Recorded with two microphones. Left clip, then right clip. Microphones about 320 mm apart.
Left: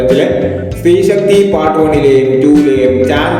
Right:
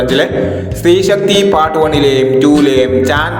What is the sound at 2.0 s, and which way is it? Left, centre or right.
Music, right.